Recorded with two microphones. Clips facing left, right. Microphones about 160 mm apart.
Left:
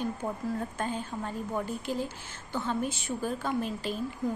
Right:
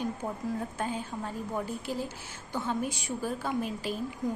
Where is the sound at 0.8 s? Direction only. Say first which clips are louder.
Left 1 dB; 10° right (ahead or behind).